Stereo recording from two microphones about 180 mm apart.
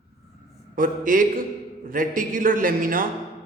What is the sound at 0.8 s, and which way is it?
A man's voice, 50° right (ahead or behind).